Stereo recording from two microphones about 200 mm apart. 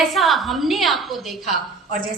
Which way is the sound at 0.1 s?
Centre (ahead or behind).